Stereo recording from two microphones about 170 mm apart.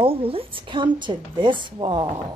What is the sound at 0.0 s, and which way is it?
Speech, 35° right (ahead or behind).